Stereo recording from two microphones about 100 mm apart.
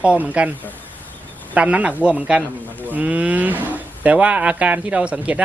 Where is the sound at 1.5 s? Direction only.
15° right (ahead or behind).